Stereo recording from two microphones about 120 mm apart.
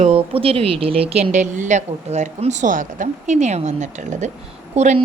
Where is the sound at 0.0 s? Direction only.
55° right (ahead or behind).